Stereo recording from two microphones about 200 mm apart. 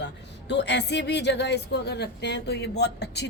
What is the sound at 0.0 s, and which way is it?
A woman's voice, 60° left (ahead or behind).